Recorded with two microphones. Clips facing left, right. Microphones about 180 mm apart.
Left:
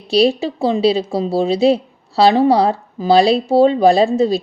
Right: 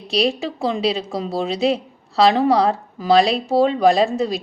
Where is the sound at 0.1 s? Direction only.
30° left (ahead or behind).